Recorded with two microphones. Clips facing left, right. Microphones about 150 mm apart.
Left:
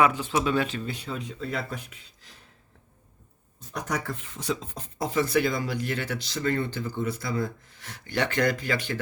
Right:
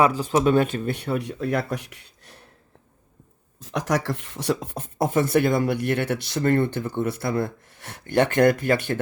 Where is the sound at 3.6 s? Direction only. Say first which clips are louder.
Right 7 dB; 90° right; by 9.0 s 55° right (ahead or behind).